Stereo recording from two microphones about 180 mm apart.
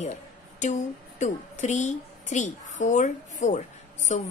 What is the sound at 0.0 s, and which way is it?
A woman's voice, 40° left (ahead or behind).